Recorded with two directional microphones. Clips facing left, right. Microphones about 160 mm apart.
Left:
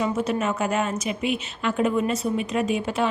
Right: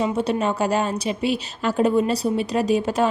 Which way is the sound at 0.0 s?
30° right (ahead or behind).